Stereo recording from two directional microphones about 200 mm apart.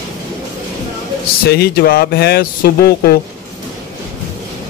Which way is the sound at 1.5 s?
50° left (ahead or behind).